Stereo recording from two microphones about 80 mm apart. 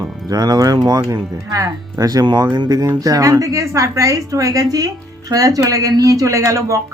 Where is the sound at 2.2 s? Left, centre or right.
Right.